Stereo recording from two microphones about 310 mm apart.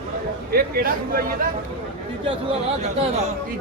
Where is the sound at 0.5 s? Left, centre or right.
Right.